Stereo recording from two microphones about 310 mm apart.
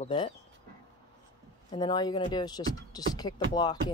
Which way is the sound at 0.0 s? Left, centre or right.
Centre.